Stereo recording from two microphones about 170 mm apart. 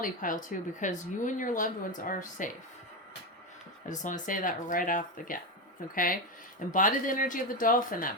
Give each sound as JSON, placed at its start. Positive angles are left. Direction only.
{"t": 0.0, "sound": "speech", "side_deg": 50}
{"t": 3.8, "sound": "speech", "side_deg": 50}